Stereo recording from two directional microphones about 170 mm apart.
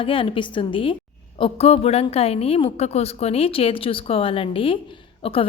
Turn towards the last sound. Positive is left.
turn(degrees=35)  # may be behind; listen again after turning